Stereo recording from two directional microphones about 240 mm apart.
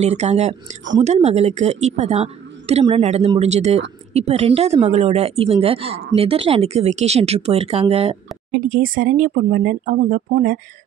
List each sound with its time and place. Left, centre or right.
0.0 s a woman's voice: right
8.5 s speech: right